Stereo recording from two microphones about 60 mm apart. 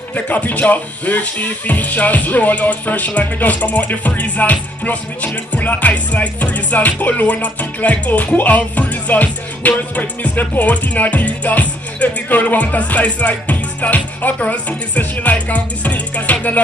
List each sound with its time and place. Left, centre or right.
0.1 s speech: left